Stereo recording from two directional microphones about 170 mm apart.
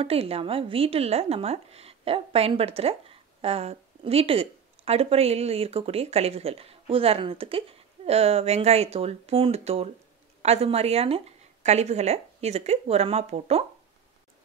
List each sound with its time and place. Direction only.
0.0 s speech: 35° right (ahead or behind)